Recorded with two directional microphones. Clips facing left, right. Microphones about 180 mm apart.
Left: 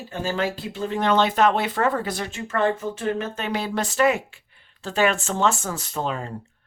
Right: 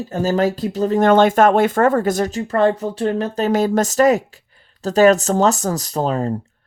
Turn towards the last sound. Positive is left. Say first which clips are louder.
# right 8 dB
turn(degrees=-40)  # may be behind; listen again after turning